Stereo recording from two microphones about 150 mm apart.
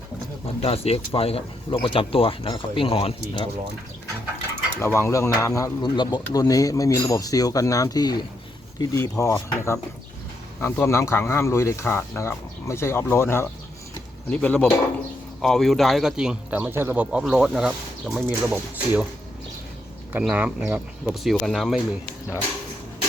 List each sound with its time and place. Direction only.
0.6 s speech: 40° left (ahead or behind)
4.8 s speech: 15° left (ahead or behind); by 19.0 s 10° right (ahead or behind)
20.1 s speech: 10° right (ahead or behind)